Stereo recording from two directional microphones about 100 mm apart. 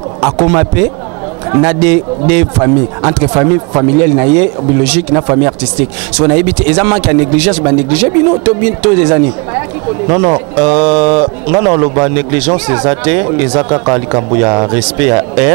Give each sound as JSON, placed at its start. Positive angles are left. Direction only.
{"t": 0.2, "sound": "speech", "side_deg": -20}